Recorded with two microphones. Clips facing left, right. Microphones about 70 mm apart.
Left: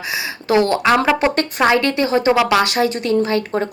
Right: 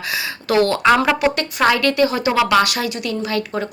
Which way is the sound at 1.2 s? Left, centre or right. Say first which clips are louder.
Left 1 dB; left.